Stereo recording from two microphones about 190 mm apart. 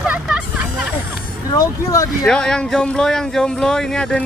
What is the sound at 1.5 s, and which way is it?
Speech, 20° left (ahead or behind).